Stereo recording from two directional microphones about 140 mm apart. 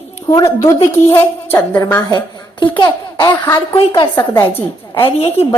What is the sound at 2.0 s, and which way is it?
Speech, 30° left (ahead or behind).